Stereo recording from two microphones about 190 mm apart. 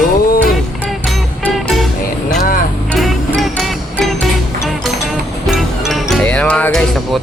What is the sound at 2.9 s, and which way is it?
Music, centre (ahead or behind).